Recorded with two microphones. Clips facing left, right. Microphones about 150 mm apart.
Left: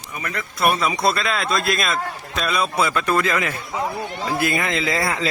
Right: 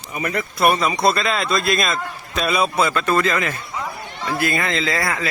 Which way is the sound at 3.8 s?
25° left (ahead or behind).